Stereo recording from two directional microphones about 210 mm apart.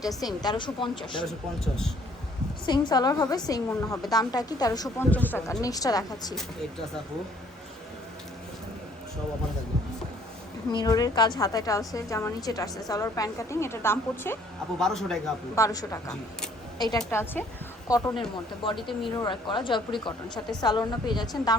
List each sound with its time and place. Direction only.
0.0 s speech: 15° left (ahead or behind)
1.3 s a man's voice: centre (ahead or behind)
2.6 s a woman's voice: 20° left (ahead or behind)
10.7 s a woman's voice: 20° left (ahead or behind); by 15.2 s 5° left (ahead or behind)
15.5 s a woman's voice: 15° left (ahead or behind)